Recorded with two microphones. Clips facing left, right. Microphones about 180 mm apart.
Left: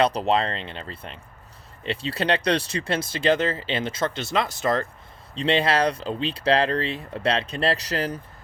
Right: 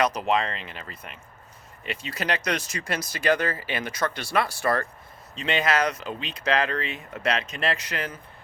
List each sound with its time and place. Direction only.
0.0 s speech: 30° left (ahead or behind)
5.3 s speech: 30° left (ahead or behind)